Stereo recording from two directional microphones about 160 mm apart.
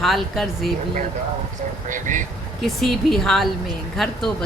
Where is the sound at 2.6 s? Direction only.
Centre (ahead or behind).